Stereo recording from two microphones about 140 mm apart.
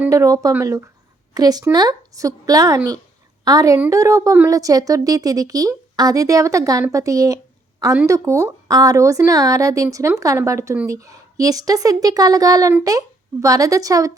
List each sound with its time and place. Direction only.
0.1 s speech: 25° right (ahead or behind)